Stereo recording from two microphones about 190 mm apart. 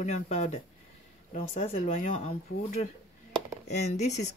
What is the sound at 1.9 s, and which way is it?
Speech, 45° left (ahead or behind).